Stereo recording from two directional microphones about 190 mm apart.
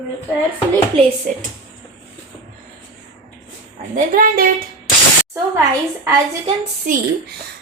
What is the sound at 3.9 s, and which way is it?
Speech, 45° right (ahead or behind).